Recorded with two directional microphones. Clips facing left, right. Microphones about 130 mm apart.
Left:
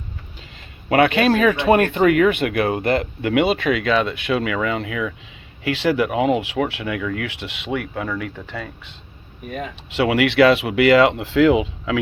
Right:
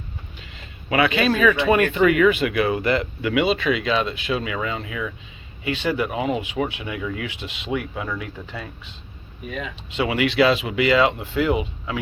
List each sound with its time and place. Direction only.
0.9 s speech: 55° left (ahead or behind)
5.6 s speech: 75° left (ahead or behind); by 9.0 s 60° left (ahead or behind)
9.5 s speech: 45° left (ahead or behind)
9.9 s speech: 70° left (ahead or behind); by 11.9 s 90° left